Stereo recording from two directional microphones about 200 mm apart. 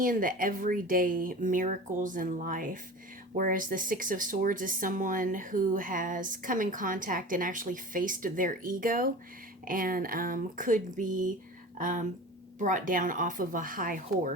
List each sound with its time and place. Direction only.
0.0 s speech: 45° right (ahead or behind)